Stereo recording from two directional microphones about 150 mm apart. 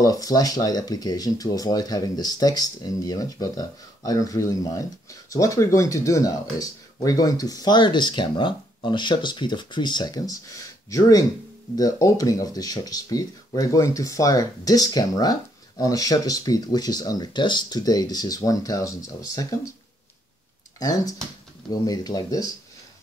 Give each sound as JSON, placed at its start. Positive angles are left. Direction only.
{"t": 0.0, "sound": "speech", "side_deg": 25}
{"t": 20.8, "sound": "speech", "side_deg": 25}